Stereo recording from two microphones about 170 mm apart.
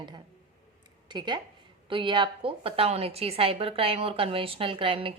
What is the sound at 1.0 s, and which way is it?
A woman's voice, 25° right (ahead or behind).